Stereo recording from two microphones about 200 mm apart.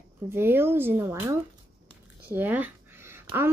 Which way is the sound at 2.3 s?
10° right (ahead or behind).